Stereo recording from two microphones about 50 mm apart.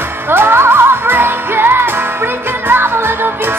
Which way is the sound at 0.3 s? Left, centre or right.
Right.